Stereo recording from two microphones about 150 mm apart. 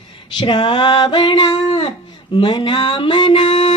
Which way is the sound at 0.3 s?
30° left (ahead or behind).